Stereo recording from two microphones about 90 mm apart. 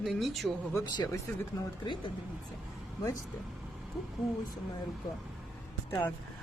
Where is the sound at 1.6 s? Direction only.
40° left (ahead or behind).